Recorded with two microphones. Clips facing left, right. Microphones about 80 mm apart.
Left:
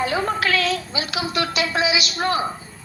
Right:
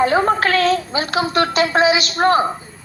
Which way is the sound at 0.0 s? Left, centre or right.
Right.